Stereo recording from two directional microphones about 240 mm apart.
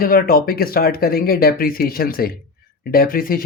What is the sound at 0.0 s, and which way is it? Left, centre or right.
Speech, left.